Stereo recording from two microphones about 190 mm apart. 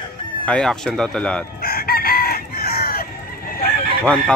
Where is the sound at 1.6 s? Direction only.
50° left (ahead or behind).